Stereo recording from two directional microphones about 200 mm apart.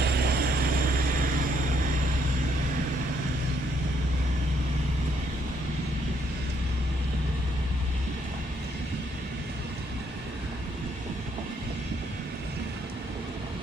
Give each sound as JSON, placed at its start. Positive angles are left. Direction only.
{"t": 0.0, "sound": "vehicle", "side_deg": -50}